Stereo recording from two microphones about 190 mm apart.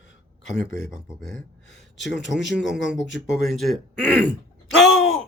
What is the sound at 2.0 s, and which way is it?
Speech, 70° left (ahead or behind).